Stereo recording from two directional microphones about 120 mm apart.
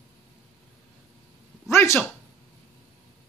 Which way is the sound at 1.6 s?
20° left (ahead or behind).